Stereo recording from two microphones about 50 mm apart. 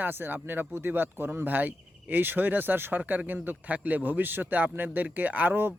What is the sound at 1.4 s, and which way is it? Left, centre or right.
A man's voice, right.